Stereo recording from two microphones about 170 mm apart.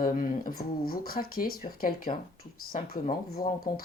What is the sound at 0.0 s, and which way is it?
Speech, 55° left (ahead or behind).